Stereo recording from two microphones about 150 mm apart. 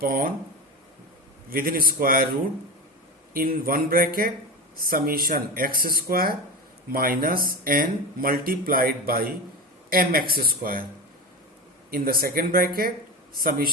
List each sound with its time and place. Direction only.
0.0 s speech: 70° right (ahead or behind)
1.5 s speech: 75° right (ahead or behind)
3.3 s speech: 75° right (ahead or behind)
11.9 s speech: 85° right